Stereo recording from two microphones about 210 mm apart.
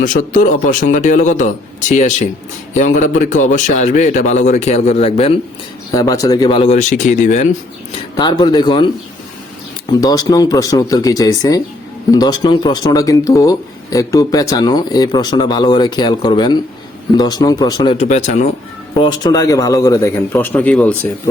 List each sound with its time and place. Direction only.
0.0 s a man's voice: 40° left (ahead or behind)
5.9 s speech: 15° left (ahead or behind); by 7.4 s 35° left (ahead or behind)
8.1 s speech: 20° left (ahead or behind)
10.0 s a man's voice: 20° left (ahead or behind)
17.9 s a man's voice: 30° left (ahead or behind)
18.9 s a man's voice: 20° left (ahead or behind)